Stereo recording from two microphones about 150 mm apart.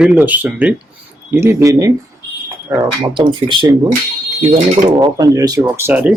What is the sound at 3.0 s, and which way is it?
Speech, 35° right (ahead or behind).